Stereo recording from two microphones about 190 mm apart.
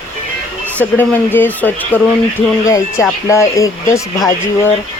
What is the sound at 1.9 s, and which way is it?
Speech, 10° right (ahead or behind).